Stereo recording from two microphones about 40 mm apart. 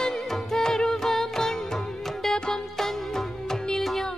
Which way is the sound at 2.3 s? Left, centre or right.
Centre.